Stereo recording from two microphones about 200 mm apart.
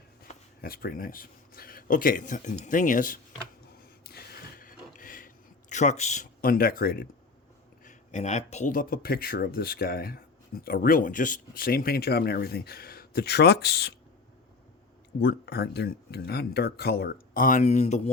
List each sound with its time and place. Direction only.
0.2 s speech: 50° left (ahead or behind)
4.0 s a sound: 50° left (ahead or behind)
7.9 s speech: 35° left (ahead or behind); by 13.9 s 55° left (ahead or behind)
15.2 s speech: 55° left (ahead or behind); by 18.1 s 35° left (ahead or behind)